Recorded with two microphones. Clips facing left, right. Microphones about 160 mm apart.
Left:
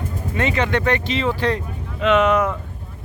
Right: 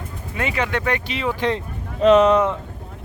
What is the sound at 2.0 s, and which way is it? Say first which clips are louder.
Speech: right 3 dB; 35° right (ahead or behind).